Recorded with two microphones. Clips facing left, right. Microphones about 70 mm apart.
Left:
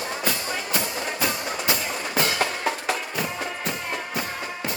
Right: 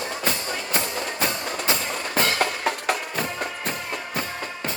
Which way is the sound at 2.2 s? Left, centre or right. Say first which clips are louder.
Right 1 dB; right.